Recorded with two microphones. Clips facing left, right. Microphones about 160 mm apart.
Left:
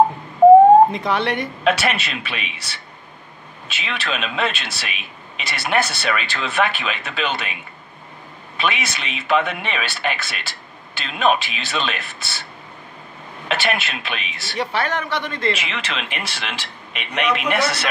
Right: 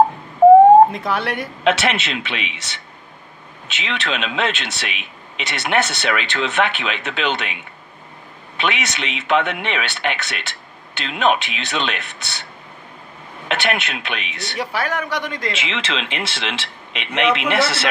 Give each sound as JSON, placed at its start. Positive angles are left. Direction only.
{"t": 0.9, "sound": "speech", "side_deg": -5}
{"t": 1.6, "sound": "speech", "side_deg": -25}
{"t": 8.5, "sound": "speech", "side_deg": -20}
{"t": 13.5, "sound": "speech", "side_deg": -20}
{"t": 14.6, "sound": "a man's voice", "side_deg": -10}
{"t": 15.5, "sound": "speech", "side_deg": -25}